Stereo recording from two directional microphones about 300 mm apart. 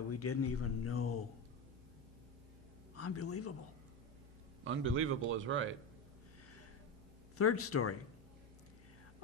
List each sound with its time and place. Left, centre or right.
0.1 s a man's voice: left
2.9 s a man's voice: left
4.6 s a man's voice: right
7.3 s a man's voice: left